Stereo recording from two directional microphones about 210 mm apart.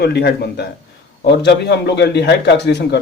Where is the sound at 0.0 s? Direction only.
50° left (ahead or behind).